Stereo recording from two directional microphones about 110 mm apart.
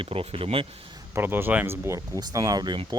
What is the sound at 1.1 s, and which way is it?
Speech, 20° right (ahead or behind).